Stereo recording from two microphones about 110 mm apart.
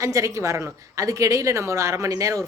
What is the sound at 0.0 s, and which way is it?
A woman's voice, 30° right (ahead or behind).